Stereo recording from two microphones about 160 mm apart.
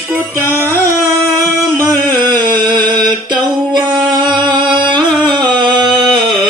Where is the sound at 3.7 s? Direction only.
25° right (ahead or behind).